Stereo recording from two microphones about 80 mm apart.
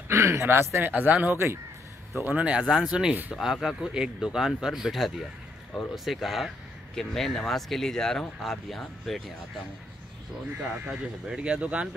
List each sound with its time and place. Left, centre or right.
0.1 s speech: right; by 9.2 s centre
10.6 s speech: centre